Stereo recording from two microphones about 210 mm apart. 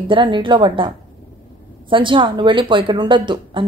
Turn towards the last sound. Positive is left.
turn(degrees=-25)  # may be behind; listen again after turning